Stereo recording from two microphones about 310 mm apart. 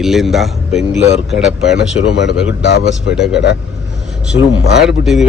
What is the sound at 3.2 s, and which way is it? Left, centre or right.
Speech, left.